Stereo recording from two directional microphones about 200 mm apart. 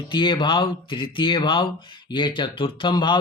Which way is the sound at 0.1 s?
25° left (ahead or behind).